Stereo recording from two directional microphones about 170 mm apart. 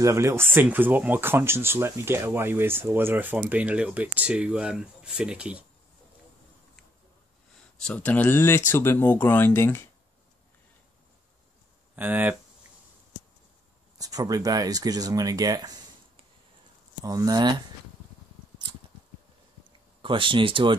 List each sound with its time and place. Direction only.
0.0 s speech: 15° right (ahead or behind)
7.8 s speech: 10° left (ahead or behind)
11.9 s speech: 10° right (ahead or behind)
13.9 s speech: 20° right (ahead or behind)
17.0 s speech: 20° right (ahead or behind)
20.0 s speech: 30° right (ahead or behind)